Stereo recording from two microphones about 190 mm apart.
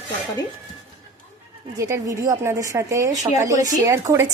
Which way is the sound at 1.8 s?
15° right (ahead or behind).